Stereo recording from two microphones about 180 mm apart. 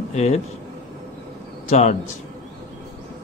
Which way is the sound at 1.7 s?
40° left (ahead or behind).